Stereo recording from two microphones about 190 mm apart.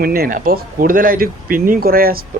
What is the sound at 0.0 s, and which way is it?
Speech, 50° right (ahead or behind).